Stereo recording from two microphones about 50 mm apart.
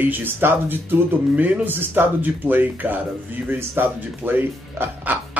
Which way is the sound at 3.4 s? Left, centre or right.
Right.